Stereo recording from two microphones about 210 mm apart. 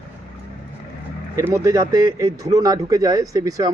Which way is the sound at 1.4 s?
15° right (ahead or behind).